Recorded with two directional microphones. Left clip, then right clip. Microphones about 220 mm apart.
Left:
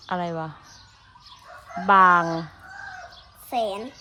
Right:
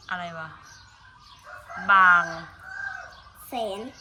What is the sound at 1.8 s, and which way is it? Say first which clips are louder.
Speech: left 1 dB; 20° left (ahead or behind).